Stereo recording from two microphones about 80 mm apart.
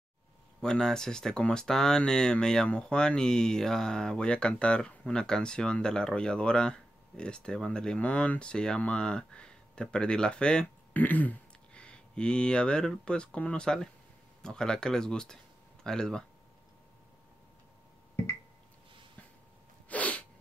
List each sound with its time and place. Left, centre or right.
0.6 s speech: centre
10.9 s speech: left
19.9 s sneeze: centre